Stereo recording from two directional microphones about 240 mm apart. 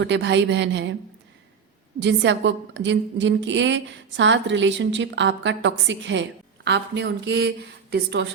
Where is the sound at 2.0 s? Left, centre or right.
Right.